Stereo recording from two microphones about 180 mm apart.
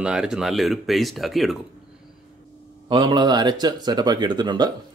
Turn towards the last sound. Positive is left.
turn(degrees=-25)  # may be behind; listen again after turning